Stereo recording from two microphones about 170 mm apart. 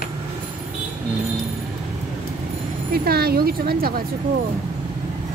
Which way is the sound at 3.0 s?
65° right (ahead or behind).